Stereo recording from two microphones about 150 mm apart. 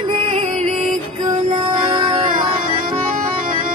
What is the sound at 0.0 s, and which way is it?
Music, 35° right (ahead or behind).